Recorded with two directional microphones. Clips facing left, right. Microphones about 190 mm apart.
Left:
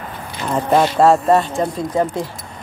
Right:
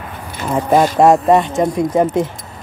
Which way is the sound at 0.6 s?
10° right (ahead or behind).